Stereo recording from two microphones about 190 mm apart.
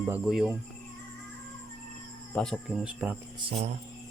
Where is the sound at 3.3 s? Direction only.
30° right (ahead or behind).